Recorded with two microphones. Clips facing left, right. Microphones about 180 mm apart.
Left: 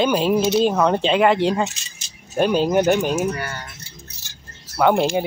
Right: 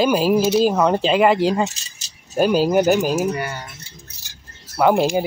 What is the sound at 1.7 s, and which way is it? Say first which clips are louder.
Speech: left 2 dB; 40° right (ahead or behind).